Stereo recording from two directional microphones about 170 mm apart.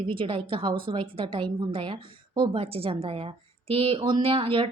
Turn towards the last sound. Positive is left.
turn(degrees=-30)  # may be behind; listen again after turning